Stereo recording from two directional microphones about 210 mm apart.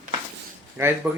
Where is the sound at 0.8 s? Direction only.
15° right (ahead or behind).